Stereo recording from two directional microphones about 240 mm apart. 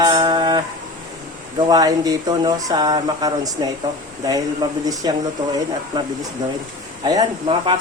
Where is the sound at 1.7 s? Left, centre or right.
Centre.